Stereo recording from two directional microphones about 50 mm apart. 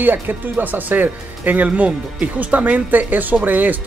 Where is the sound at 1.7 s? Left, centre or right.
Right.